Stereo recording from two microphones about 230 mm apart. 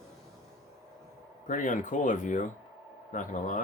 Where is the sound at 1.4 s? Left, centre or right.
Left.